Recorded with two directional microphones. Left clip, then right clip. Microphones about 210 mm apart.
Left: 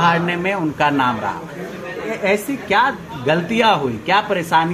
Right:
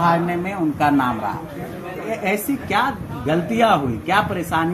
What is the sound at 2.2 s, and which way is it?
A woman's voice, 20° left (ahead or behind).